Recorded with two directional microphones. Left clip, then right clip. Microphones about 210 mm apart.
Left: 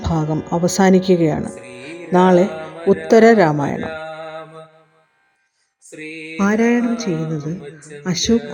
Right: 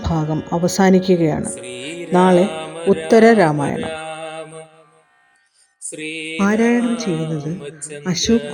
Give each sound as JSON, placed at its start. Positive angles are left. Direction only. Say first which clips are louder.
{"t": 0.0, "sound": "speech", "louder": "left 1 dB", "side_deg": 0}
{"t": 2.6, "sound": "music", "louder": "even", "side_deg": 0}
{"t": 3.1, "sound": "speech", "louder": "left 1 dB", "side_deg": 0}
{"t": 3.9, "sound": "mantra", "louder": "right 1 dB", "side_deg": -30}
{"t": 6.3, "sound": "speech", "louder": "even", "side_deg": 0}